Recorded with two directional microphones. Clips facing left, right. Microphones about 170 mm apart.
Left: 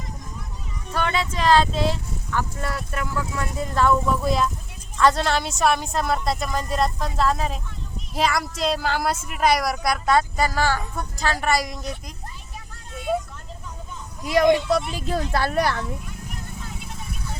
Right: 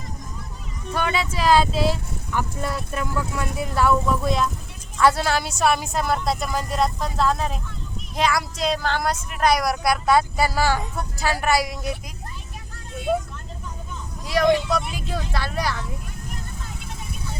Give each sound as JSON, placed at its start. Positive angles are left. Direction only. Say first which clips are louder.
{"t": 0.9, "sound": "a woman's voice", "louder": "even", "side_deg": -10}
{"t": 14.3, "sound": "speech", "louder": "left 1 dB", "side_deg": 20}
{"t": 15.0, "sound": "speech", "louder": "left 5 dB", "side_deg": 45}